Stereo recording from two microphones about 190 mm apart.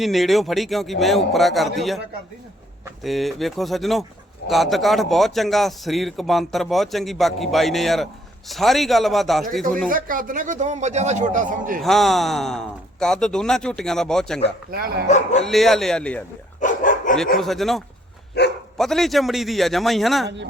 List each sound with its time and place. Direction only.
0.0 s a man's voice: centre (ahead or behind)
3.0 s a man's voice: centre (ahead or behind)
9.9 s a man's voice: 45° right (ahead or behind)
11.8 s a man's voice: centre (ahead or behind)
14.7 s speech: 50° right (ahead or behind)
15.0 s speech: 35° left (ahead or behind)
15.4 s a man's voice: centre (ahead or behind)
16.6 s dog: 45° left (ahead or behind)
17.3 s a man's voice: centre (ahead or behind)
18.4 s speech: 60° left (ahead or behind)
18.8 s a man's voice: centre (ahead or behind)
20.2 s a woman's voice: 65° right (ahead or behind)